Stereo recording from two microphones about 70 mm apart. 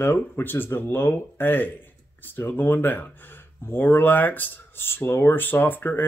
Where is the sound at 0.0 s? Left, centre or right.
Left.